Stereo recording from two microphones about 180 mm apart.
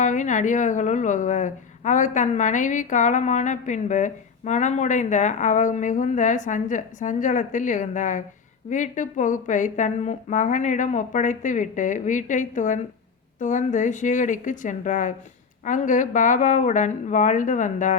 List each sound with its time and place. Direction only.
0.0 s a woman's voice: 45° left (ahead or behind)